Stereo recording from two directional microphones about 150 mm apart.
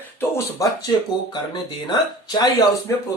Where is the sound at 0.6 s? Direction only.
20° left (ahead or behind).